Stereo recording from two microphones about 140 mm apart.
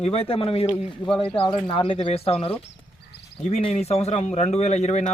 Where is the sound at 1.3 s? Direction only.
40° left (ahead or behind).